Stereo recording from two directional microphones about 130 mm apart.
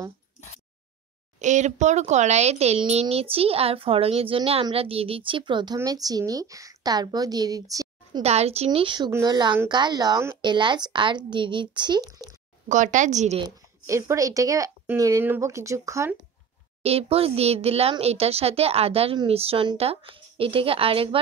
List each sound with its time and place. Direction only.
1.4 s a woman's voice: 65° right (ahead or behind); by 8.2 s 25° right (ahead or behind)
8.2 s a woman's voice: 55° right (ahead or behind); by 12.3 s 25° right (ahead or behind)
12.6 s speech: 70° right (ahead or behind)
13.8 s a woman's voice: 25° right (ahead or behind)
16.8 s speech: 50° right (ahead or behind)